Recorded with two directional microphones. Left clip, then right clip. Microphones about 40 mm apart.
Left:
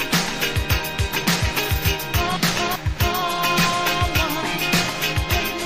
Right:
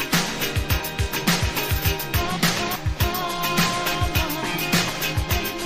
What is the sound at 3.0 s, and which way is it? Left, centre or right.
Music, right.